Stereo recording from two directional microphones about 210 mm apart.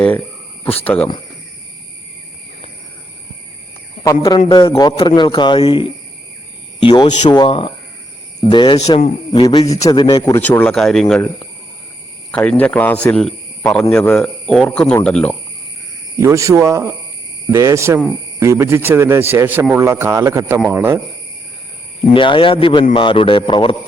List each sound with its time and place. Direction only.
0.8 s speech: 10° left (ahead or behind)
4.0 s a man's voice: 15° left (ahead or behind)
12.3 s speech: 5° left (ahead or behind)
16.1 s a man's voice: 15° right (ahead or behind)
22.0 s a man's voice: 25° left (ahead or behind)